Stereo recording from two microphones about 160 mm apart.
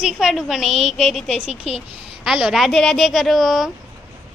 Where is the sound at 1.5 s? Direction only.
40° left (ahead or behind).